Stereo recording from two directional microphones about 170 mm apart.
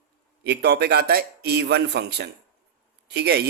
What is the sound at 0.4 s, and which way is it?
A man's voice, 75° right (ahead or behind).